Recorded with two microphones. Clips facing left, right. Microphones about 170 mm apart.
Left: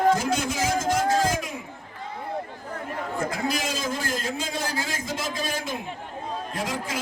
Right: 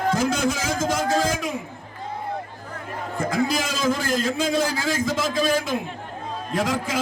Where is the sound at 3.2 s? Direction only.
90° right.